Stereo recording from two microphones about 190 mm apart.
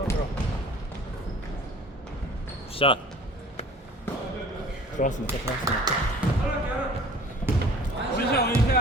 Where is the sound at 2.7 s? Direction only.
30° left (ahead or behind).